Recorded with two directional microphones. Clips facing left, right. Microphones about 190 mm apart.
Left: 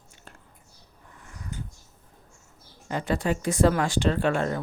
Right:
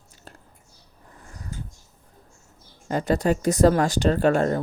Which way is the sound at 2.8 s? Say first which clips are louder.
Right 5 dB; 40° right (ahead or behind).